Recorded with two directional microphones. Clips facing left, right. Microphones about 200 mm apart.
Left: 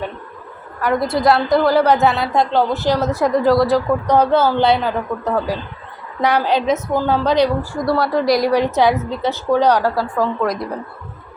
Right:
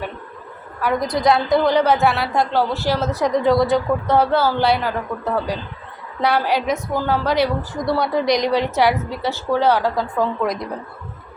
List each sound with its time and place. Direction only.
1.2 s a woman's voice: centre (ahead or behind); by 3.1 s 20° left (ahead or behind)
3.2 s a woman's voice: centre (ahead or behind)
4.0 s a woman's voice: 15° left (ahead or behind)
7.9 s a woman's voice: centre (ahead or behind)